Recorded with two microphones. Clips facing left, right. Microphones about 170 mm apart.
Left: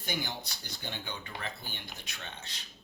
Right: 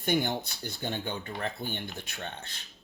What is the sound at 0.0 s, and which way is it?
Speech, 55° right (ahead or behind).